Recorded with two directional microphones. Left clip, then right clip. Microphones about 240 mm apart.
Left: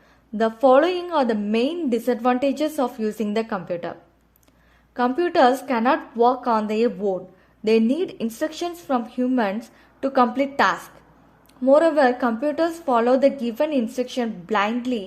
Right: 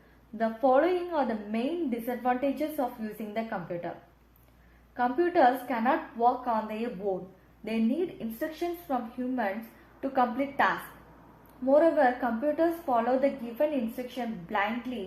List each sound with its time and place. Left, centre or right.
0.3 s a woman's voice: left
4.9 s a woman's voice: left